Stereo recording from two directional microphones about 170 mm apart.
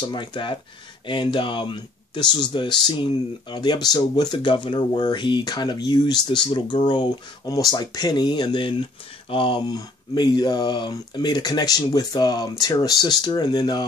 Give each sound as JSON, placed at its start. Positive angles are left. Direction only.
{"t": 0.1, "sound": "speech", "side_deg": 30}